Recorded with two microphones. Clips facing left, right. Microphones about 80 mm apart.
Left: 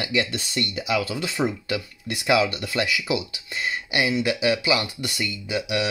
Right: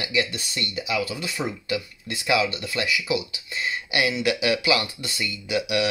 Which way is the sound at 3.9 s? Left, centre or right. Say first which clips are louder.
Even; left.